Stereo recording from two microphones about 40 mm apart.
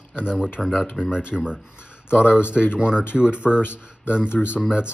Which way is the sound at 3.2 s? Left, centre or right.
Right.